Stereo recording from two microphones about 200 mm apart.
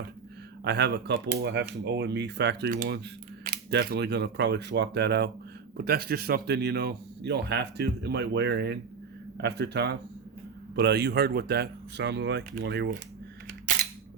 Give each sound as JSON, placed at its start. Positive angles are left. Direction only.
{"t": 0.6, "sound": "speech", "side_deg": -55}